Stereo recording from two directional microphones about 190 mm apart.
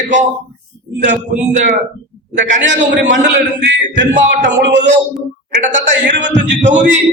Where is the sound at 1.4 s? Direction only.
40° right (ahead or behind).